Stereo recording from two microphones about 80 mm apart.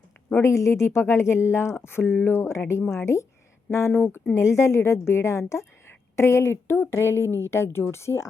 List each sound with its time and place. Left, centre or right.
0.3 s a woman's voice: left